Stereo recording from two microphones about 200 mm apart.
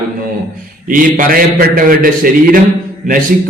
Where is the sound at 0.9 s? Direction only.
45° right (ahead or behind).